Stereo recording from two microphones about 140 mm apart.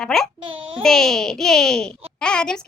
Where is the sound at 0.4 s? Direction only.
40° right (ahead or behind).